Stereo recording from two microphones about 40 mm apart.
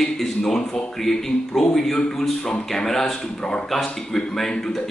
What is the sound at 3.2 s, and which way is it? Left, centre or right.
Speech, left.